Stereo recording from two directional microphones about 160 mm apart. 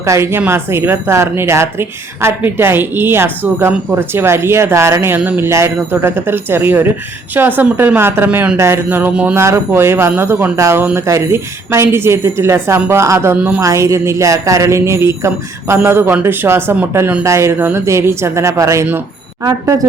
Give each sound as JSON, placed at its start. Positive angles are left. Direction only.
{"t": 0.0, "sound": "speech", "side_deg": -15}
{"t": 13.6, "sound": "speech", "side_deg": -20}